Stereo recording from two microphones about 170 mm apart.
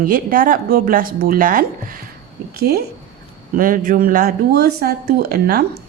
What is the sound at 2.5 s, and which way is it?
Speech, 65° right (ahead or behind).